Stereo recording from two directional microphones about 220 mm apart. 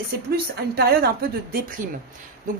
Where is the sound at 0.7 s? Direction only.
45° right (ahead or behind).